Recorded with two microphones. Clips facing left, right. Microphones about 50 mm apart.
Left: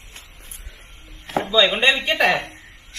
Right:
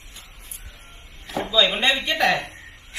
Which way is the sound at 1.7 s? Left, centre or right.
Left.